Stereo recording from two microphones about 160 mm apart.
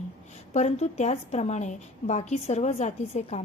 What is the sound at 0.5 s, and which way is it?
A woman's voice, 45° left (ahead or behind).